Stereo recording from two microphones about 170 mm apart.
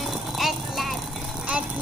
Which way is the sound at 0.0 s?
Centre (ahead or behind).